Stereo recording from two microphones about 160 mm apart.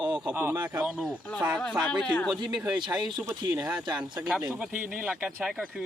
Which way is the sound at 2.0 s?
5° left (ahead or behind).